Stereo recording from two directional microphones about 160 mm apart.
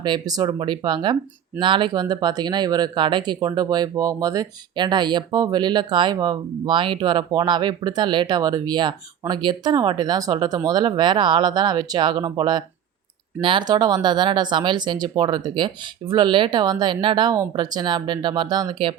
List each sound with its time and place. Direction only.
0.0 s speech: 25° right (ahead or behind)